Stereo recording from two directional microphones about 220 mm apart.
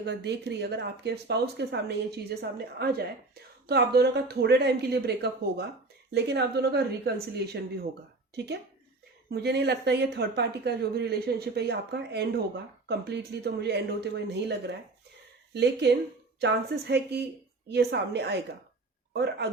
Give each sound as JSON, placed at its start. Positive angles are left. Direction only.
{"t": 0.0, "sound": "speech", "side_deg": -50}